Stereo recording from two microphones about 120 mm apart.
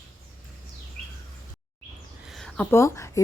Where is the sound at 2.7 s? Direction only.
20° left (ahead or behind).